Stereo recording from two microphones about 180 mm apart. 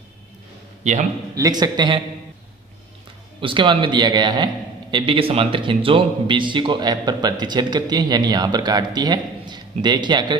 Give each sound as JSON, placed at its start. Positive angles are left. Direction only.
{"t": 1.4, "sound": "speech", "side_deg": -20}
{"t": 3.4, "sound": "speech", "side_deg": -25}